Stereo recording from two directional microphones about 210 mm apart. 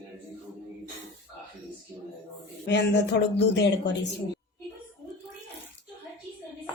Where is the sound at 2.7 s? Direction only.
55° left (ahead or behind).